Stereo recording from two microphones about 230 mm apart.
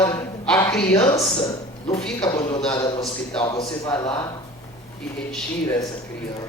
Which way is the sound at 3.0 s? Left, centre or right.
Centre.